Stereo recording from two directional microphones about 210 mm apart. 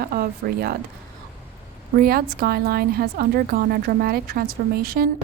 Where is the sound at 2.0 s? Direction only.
45° right (ahead or behind).